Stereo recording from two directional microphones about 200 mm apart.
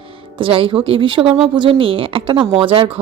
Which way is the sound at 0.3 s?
25° right (ahead or behind).